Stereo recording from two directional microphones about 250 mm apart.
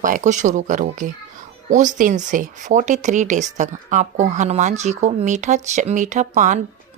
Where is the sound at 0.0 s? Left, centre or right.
Right.